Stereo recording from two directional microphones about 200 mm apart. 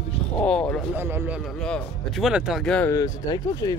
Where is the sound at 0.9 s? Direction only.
10° right (ahead or behind).